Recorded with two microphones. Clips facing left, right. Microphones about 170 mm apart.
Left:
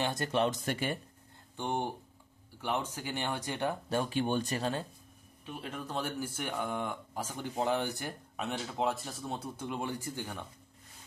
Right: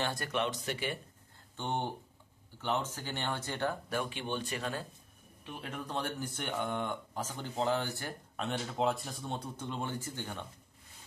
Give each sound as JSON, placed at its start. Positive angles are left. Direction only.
{"t": 0.0, "sound": "speech", "side_deg": 20}
{"t": 0.4, "sound": "speech", "side_deg": 45}
{"t": 1.6, "sound": "speech", "side_deg": 10}
{"t": 3.9, "sound": "speech", "side_deg": 35}
{"t": 5.4, "sound": "speech", "side_deg": 0}
{"t": 8.4, "sound": "speech", "side_deg": 5}